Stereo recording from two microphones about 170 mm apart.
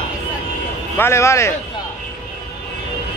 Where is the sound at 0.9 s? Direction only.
15° left (ahead or behind).